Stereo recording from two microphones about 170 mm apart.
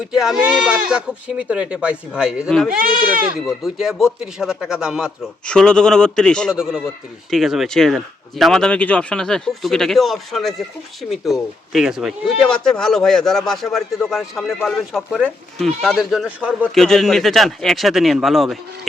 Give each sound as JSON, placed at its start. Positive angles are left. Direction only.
{"t": 0.0, "sound": "speech", "side_deg": -5}
{"t": 2.7, "sound": "speech", "side_deg": -55}
{"t": 3.4, "sound": "speech", "side_deg": 0}